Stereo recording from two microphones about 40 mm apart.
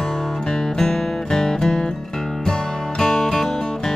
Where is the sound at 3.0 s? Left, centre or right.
Centre.